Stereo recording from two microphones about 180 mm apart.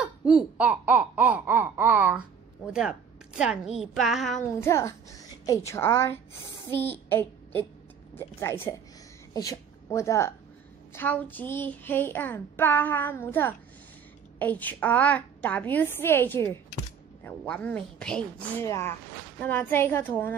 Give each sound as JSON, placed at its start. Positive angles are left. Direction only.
{"t": 0.0, "sound": "speech", "side_deg": -5}
{"t": 4.6, "sound": "a child's voice", "side_deg": 15}
{"t": 6.7, "sound": "child singing", "side_deg": 10}
{"t": 8.1, "sound": "a child's voice", "side_deg": 15}
{"t": 18.7, "sound": "a child's voice", "side_deg": 15}